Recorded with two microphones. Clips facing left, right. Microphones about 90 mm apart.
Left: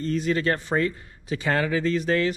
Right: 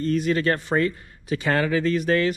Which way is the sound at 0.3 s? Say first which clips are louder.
Right 2 dB; 50° right (ahead or behind).